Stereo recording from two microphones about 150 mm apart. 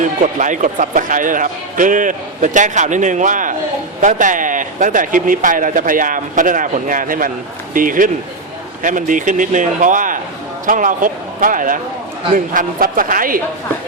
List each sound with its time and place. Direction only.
0.0 s a man's voice: 55° right (ahead or behind)